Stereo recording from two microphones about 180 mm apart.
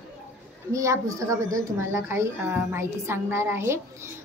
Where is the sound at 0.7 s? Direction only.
20° right (ahead or behind).